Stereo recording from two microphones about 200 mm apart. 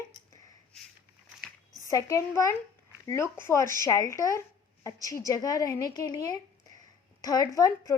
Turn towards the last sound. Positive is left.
turn(degrees=15)  # may be behind; listen again after turning